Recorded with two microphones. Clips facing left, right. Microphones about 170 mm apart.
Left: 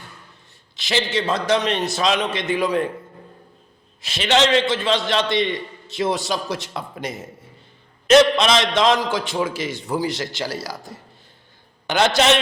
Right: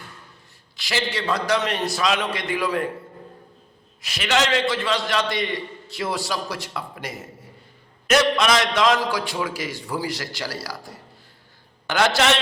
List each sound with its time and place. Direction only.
0.8 s a man's voice: 20° left (ahead or behind)
4.0 s a man's voice: 25° left (ahead or behind)